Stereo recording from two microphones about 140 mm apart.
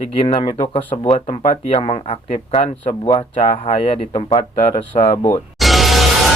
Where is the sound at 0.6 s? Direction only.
45° left (ahead or behind).